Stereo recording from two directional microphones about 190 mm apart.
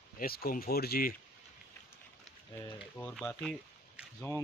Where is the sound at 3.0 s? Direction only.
10° left (ahead or behind).